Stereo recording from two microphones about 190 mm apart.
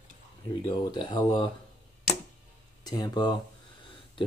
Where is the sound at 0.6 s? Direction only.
20° left (ahead or behind).